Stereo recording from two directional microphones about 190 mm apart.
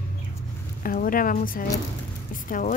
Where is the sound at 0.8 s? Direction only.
45° left (ahead or behind).